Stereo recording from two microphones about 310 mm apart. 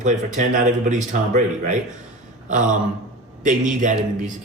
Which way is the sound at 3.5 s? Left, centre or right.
Right.